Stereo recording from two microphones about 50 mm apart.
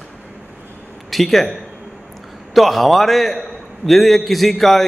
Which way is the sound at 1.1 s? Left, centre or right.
Centre.